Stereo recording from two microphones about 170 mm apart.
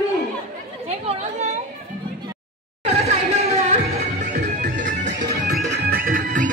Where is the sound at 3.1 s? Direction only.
40° right (ahead or behind).